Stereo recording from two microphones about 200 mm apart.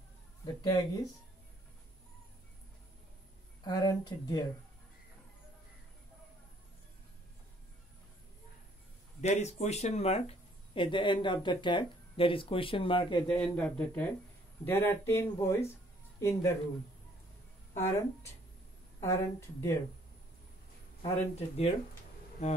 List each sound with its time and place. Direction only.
0.6 s speech: 20° left (ahead or behind)
3.6 s speech: 20° left (ahead or behind)
9.2 s speech: 35° left (ahead or behind)
13.3 s speech: 5° left (ahead or behind)
17.7 s speech: 10° left (ahead or behind)
21.0 s speech: 30° left (ahead or behind)